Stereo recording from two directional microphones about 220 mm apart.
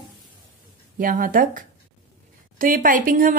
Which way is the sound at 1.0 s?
40° right (ahead or behind).